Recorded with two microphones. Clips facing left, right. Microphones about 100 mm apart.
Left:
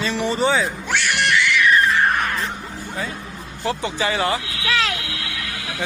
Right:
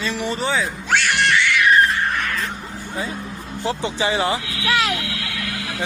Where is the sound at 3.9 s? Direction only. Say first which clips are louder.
Right 1 dB; 20° right (ahead or behind).